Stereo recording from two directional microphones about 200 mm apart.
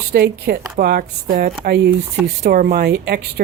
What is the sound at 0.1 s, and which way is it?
Speech, 50° right (ahead or behind).